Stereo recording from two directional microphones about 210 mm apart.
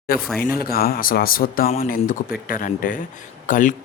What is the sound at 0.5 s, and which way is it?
Speech, 45° left (ahead or behind).